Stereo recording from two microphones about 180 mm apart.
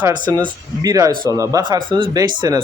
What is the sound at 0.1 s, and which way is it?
Speech, 20° right (ahead or behind).